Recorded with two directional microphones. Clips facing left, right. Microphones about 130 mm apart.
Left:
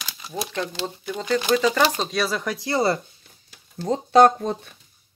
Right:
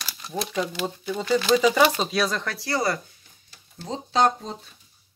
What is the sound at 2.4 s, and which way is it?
Speech, 15° left (ahead or behind).